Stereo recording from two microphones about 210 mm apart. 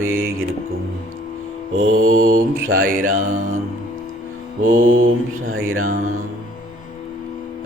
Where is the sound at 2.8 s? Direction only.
40° right (ahead or behind).